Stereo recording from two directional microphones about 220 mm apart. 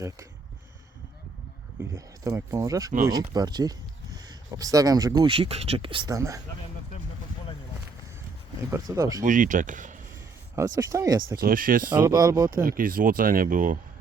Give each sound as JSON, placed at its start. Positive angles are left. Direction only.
{"t": 1.9, "sound": "speech", "side_deg": -15}
{"t": 8.7, "sound": "speech", "side_deg": -15}
{"t": 9.2, "sound": "speech", "side_deg": -35}
{"t": 10.5, "sound": "speech", "side_deg": -15}
{"t": 11.3, "sound": "speech", "side_deg": -40}
{"t": 12.0, "sound": "speech", "side_deg": -15}
{"t": 12.6, "sound": "speech", "side_deg": -40}